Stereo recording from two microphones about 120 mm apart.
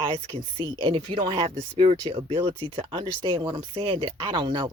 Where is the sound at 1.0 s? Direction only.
45° right (ahead or behind).